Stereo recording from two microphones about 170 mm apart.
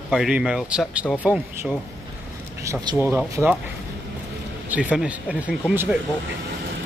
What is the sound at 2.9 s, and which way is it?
Speech, 15° right (ahead or behind).